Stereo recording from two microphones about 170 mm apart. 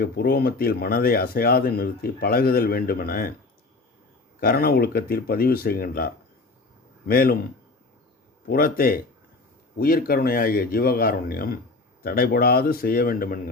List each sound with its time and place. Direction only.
0.0 s speech: 65° left (ahead or behind)
4.4 s speech: 60° left (ahead or behind)
7.1 s speech: 60° left (ahead or behind)
8.4 s speech: 60° left (ahead or behind)